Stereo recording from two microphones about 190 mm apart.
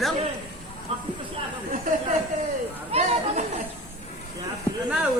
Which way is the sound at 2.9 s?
30° right (ahead or behind).